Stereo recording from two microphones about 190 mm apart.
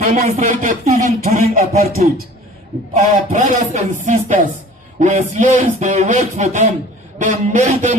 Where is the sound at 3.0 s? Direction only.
40° right (ahead or behind).